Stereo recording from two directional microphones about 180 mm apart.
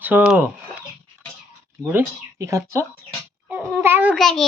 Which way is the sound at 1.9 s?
15° right (ahead or behind).